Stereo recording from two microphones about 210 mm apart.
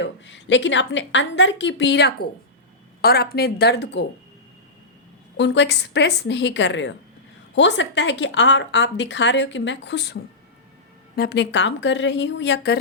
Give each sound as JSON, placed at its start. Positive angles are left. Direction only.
{"t": 0.0, "sound": "a woman's voice", "side_deg": 60}
{"t": 5.4, "sound": "a woman's voice", "side_deg": 55}
{"t": 11.2, "sound": "a woman's voice", "side_deg": 55}